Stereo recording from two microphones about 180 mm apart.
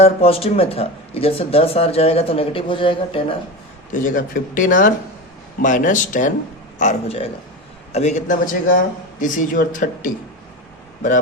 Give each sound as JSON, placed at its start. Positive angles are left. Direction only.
{"t": 0.0, "sound": "speech", "side_deg": 35}
{"t": 3.9, "sound": "speech", "side_deg": 45}